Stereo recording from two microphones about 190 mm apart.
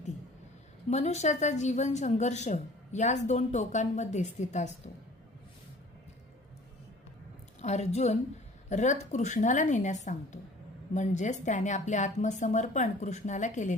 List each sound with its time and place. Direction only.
0.9 s a woman's voice: 35° left (ahead or behind)
7.6 s a woman's voice: 35° left (ahead or behind)